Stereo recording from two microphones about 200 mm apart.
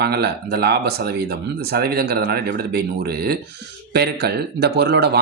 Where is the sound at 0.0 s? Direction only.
55° right (ahead or behind).